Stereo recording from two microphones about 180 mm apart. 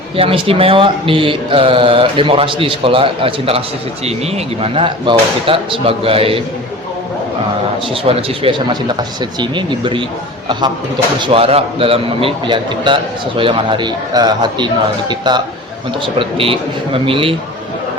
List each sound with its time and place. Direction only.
0.2 s a man's voice: 30° right (ahead or behind)
8.0 s a man's voice: 30° right (ahead or behind)
11.2 s a man's voice: 35° right (ahead or behind)